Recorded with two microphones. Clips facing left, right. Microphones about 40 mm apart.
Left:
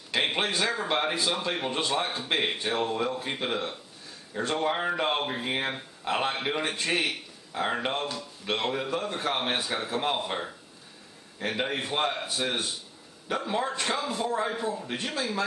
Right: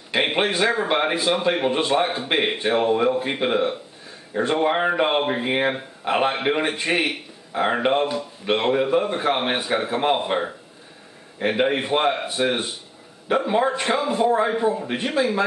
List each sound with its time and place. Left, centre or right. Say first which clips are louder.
0.1 s speech: right 6 dB; right